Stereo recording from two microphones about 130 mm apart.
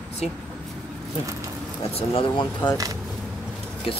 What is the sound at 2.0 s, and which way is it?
Speech, 45° left (ahead or behind).